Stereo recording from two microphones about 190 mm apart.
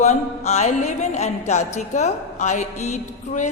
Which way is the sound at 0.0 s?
35° left (ahead or behind).